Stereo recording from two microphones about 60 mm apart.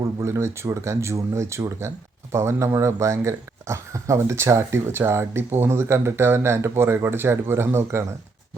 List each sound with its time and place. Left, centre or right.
0.2 s speech: right